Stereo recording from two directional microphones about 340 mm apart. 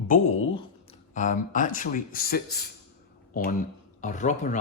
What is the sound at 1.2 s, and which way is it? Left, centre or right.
Speech, left.